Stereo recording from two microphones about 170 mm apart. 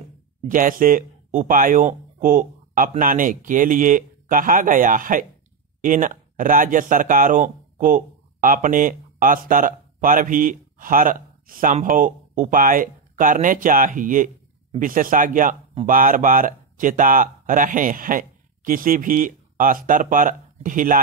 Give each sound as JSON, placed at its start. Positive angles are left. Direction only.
{"t": 0.5, "sound": "speech", "side_deg": -55}